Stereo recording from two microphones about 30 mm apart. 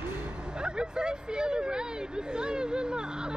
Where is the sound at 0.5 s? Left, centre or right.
Right.